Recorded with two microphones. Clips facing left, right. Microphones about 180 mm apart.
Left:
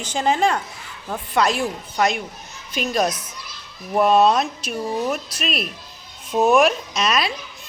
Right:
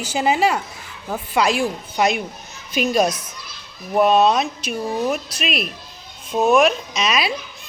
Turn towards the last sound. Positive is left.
turn(degrees=0)  # may be behind; listen again after turning